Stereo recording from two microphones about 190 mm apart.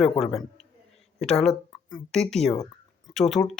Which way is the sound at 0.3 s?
Centre (ahead or behind).